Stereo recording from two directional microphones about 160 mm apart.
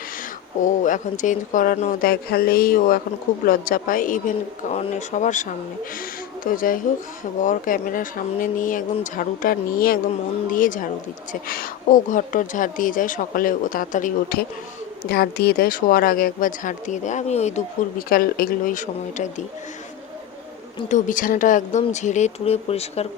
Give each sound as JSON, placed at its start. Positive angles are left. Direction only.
{"t": 0.6, "sound": "a woman's voice", "side_deg": 50}
{"t": 4.7, "sound": "speech", "side_deg": 45}
{"t": 6.0, "sound": "a sound", "side_deg": 60}
{"t": 7.4, "sound": "a woman's voice", "side_deg": 55}
{"t": 18.1, "sound": "a woman's voice", "side_deg": 65}
{"t": 20.9, "sound": "speech", "side_deg": 55}